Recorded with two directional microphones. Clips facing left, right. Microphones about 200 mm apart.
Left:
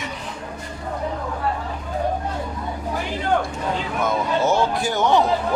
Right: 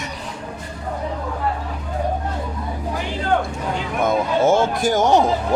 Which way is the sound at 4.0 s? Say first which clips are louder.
Right 4 dB; 50° right (ahead or behind).